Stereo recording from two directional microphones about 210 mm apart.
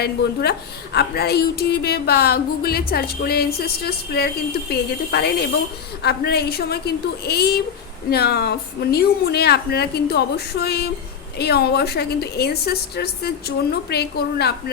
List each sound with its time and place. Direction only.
0.0 s speech: 50° left (ahead or behind)